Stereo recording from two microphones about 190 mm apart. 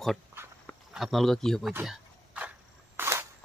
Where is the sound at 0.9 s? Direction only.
Centre (ahead or behind).